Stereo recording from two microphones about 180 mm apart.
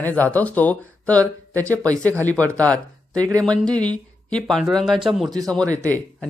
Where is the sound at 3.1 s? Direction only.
20° right (ahead or behind).